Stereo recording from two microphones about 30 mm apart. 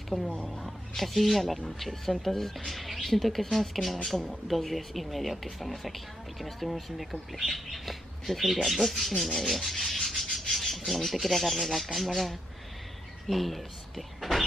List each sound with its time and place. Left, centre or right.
0.1 s speech: right
0.5 s speech: centre
9.5 s rub: centre
10.5 s speech: centre